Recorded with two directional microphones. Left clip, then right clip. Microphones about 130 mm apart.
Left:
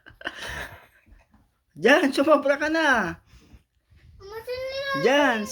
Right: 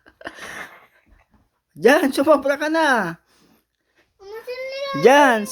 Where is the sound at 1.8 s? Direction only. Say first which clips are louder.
Right 3 dB; 45° right (ahead or behind).